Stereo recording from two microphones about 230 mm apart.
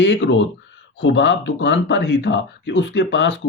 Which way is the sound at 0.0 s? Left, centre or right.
Left.